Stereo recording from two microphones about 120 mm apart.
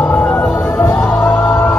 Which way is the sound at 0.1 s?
5° left (ahead or behind).